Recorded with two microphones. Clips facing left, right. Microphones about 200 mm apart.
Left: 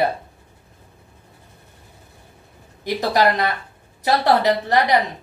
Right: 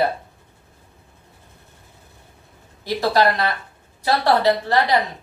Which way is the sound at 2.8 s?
20° left (ahead or behind).